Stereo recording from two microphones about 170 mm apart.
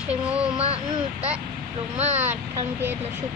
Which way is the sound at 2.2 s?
10° right (ahead or behind).